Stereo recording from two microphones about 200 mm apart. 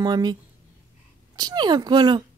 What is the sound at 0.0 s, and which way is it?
Speech, 20° right (ahead or behind).